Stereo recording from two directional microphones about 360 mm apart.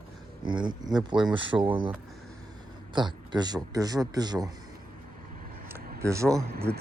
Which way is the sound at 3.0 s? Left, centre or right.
Centre.